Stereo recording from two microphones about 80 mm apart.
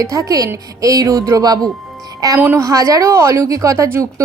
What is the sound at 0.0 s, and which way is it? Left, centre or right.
A woman's voice, right.